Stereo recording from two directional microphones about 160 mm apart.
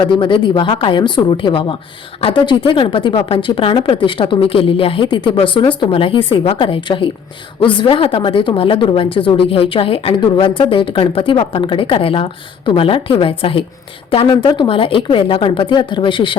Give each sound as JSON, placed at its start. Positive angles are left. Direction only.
{"t": 0.0, "sound": "a woman's voice", "side_deg": 30}